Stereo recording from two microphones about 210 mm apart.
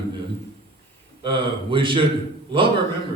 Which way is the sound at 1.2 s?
25° right (ahead or behind).